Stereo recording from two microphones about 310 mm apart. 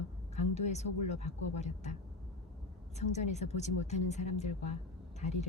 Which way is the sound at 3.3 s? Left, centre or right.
Left.